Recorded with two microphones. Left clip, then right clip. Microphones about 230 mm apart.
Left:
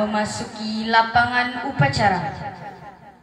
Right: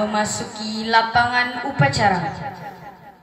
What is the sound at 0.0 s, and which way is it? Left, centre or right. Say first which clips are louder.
A man's voice: right 1 dB; right.